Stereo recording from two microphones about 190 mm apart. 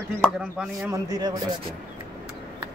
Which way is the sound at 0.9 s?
20° right (ahead or behind).